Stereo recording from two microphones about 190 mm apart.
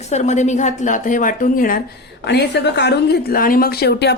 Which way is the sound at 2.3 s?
65° left (ahead or behind).